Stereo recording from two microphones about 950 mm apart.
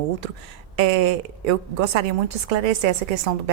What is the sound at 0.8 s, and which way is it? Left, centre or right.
A woman's voice, right.